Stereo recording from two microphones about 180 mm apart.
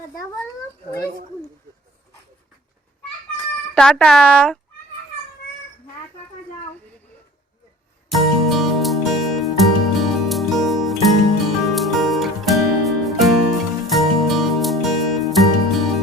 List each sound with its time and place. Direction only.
0.9 s a child's voice: 20° left (ahead or behind)
3.8 s speech: 5° left (ahead or behind)
8.1 s music: centre (ahead or behind)